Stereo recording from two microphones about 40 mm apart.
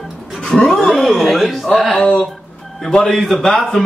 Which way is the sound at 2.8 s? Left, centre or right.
Centre.